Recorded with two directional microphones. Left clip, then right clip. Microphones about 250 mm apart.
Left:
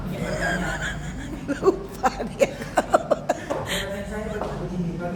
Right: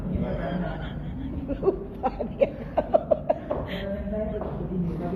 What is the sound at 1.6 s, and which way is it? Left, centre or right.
Chuckle, left.